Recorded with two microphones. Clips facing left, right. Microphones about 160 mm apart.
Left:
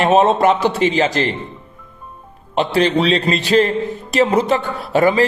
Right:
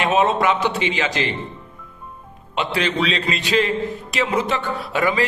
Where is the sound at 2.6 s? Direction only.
35° left (ahead or behind).